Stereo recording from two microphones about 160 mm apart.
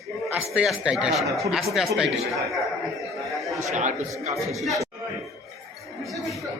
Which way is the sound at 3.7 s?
50° right (ahead or behind).